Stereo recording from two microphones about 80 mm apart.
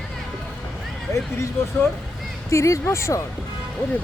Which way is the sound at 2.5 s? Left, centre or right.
Left.